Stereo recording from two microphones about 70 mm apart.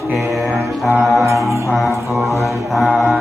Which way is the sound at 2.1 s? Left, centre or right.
Centre.